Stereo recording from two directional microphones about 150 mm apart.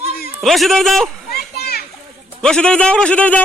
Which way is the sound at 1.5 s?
90° left.